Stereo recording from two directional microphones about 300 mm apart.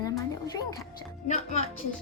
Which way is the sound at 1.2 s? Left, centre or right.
Left.